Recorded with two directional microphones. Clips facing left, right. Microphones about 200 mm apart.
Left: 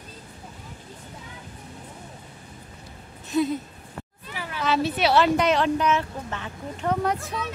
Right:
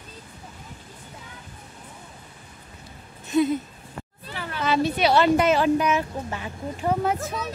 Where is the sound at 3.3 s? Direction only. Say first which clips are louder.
Right 2 dB; centre (ahead or behind).